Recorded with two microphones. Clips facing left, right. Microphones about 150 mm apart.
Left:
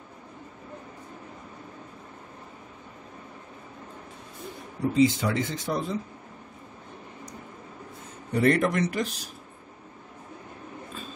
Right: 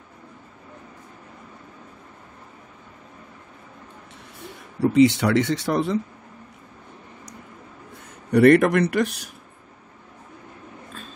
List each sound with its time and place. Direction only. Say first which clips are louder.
4.9 s speech: right 6 dB; 75° right (ahead or behind)
8.3 s speech: right 8 dB; 70° right (ahead or behind)